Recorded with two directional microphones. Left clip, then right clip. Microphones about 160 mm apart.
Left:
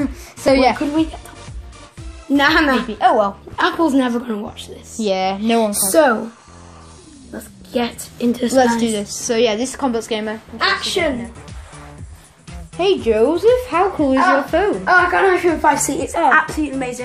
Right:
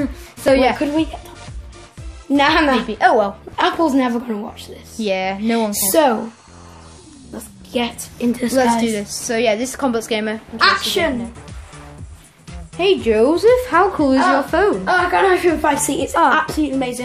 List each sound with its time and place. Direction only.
0.0 s a sound: 10° left (ahead or behind)
2.3 s a woman's voice: 20° right (ahead or behind)
7.2 s a woman's voice: centre (ahead or behind)
8.3 s a woman's voice: 20° right (ahead or behind)
8.8 s a woman's voice: 5° right (ahead or behind)
9.8 s a woman's voice: 15° right (ahead or behind)
10.6 s a woman's voice: 65° right (ahead or behind)
12.4 s music: centre (ahead or behind)
13.1 s a woman's voice: 20° right (ahead or behind)